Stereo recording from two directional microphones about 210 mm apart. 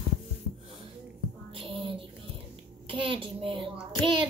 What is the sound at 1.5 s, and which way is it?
Child singing, 25° right (ahead or behind).